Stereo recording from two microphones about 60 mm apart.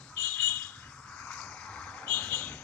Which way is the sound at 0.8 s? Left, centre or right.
Centre.